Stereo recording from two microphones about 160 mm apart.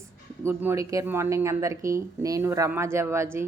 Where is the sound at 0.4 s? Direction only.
15° right (ahead or behind).